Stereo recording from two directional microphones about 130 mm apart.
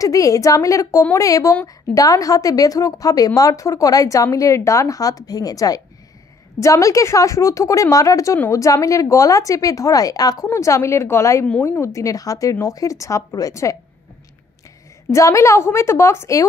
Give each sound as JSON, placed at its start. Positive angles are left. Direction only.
{"t": 0.0, "sound": "a woman's voice", "side_deg": 25}
{"t": 15.0, "sound": "a woman's voice", "side_deg": 25}